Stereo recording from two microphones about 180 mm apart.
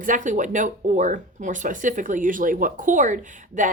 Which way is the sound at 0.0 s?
45° right (ahead or behind).